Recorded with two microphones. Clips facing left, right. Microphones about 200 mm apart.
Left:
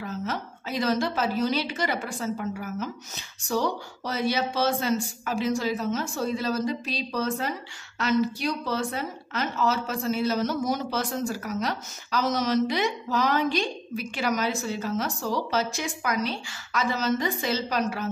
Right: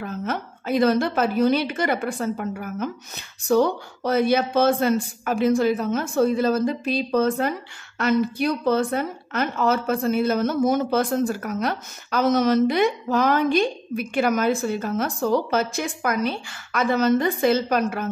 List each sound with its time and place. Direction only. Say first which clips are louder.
0.0 s a woman's voice: right 4 dB; 55° right (ahead or behind)